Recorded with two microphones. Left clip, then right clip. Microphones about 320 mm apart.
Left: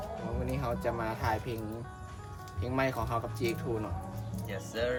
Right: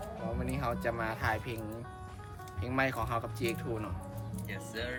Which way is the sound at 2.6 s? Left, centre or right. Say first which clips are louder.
Even; centre.